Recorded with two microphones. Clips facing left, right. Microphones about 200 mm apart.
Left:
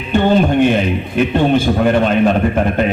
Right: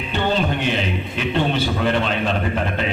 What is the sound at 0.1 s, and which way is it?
A man's voice, 50° left (ahead or behind).